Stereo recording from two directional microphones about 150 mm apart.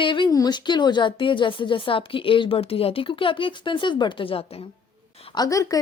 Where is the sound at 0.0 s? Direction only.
35° left (ahead or behind).